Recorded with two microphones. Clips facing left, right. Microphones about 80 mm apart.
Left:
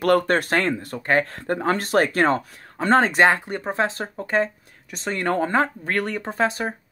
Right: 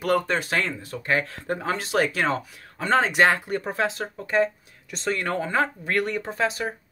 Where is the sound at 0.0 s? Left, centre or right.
Left.